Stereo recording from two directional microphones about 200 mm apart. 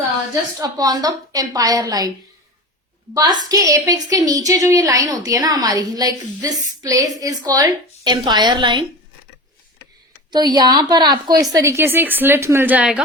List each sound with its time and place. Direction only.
0.6 s a woman's voice: 20° right (ahead or behind)
3.2 s a woman's voice: 20° right (ahead or behind)
10.3 s a woman's voice: 20° right (ahead or behind)